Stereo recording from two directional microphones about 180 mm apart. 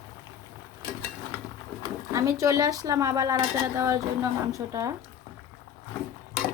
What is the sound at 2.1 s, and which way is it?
Speech, 15° right (ahead or behind).